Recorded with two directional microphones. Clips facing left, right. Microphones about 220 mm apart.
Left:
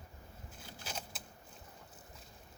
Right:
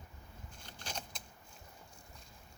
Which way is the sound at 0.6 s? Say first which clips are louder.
Even; 5° left (ahead or behind).